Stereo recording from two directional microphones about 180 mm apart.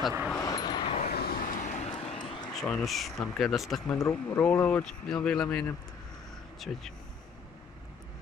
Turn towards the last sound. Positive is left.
turn(degrees=0)  # may be behind; listen again after turning